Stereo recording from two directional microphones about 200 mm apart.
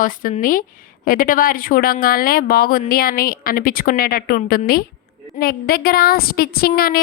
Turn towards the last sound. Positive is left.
turn(degrees=50)  # may be behind; listen again after turning